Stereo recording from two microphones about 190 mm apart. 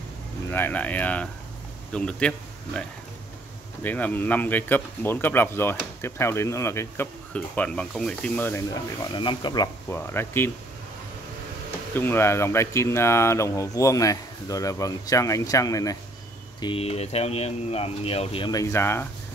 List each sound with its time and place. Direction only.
0.5 s speech: 10° left (ahead or behind)
3.8 s speech: 10° left (ahead or behind)
9.1 s speech: 25° left (ahead or behind)
11.9 s speech: 10° left (ahead or behind)
16.6 s speech: 30° left (ahead or behind); by 19.0 s 15° left (ahead or behind)